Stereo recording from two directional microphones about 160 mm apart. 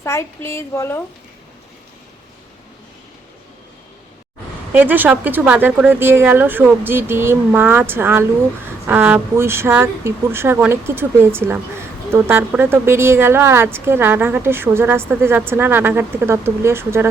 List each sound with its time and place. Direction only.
0.0 s a woman's voice: 15° left (ahead or behind)
4.7 s a woman's voice: 10° right (ahead or behind)